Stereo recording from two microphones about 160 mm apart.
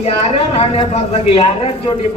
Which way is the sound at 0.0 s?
40° left (ahead or behind).